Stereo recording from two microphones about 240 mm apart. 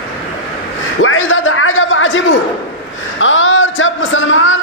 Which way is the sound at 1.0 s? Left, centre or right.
Left.